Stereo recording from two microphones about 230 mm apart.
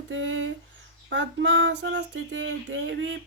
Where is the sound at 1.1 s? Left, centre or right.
Right.